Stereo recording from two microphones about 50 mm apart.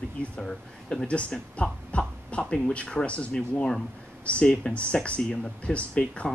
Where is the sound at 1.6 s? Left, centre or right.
Left.